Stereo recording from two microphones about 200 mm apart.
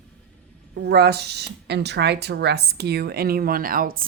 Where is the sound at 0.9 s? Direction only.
55° right (ahead or behind).